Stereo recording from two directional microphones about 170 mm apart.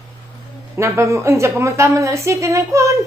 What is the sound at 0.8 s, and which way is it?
A woman's voice, 15° right (ahead or behind).